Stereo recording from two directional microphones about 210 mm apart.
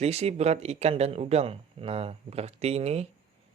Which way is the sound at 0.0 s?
30° right (ahead or behind).